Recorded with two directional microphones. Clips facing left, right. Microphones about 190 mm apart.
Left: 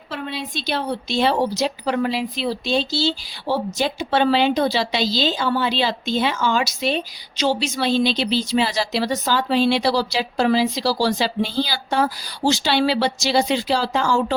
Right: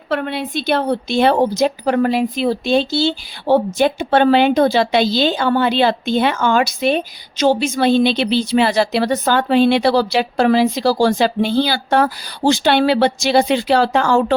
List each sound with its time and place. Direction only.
0.1 s a woman's voice: 60° right (ahead or behind)